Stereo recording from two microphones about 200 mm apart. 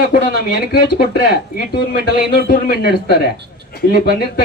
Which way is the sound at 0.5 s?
50° left (ahead or behind).